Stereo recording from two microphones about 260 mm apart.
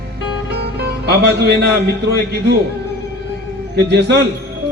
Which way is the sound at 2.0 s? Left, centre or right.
Right.